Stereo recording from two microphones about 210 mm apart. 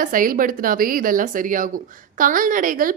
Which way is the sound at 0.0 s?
40° right (ahead or behind).